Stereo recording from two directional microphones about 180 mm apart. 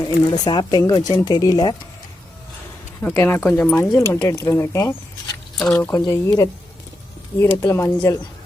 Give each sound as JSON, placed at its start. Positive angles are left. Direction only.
{"t": 0.3, "sound": "speech", "side_deg": 25}
{"t": 3.0, "sound": "speech", "side_deg": 10}